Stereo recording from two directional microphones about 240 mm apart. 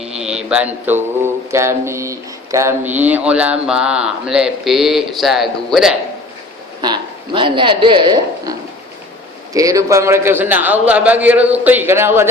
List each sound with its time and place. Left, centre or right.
0.2 s mantra: centre
6.8 s a woman's voice: centre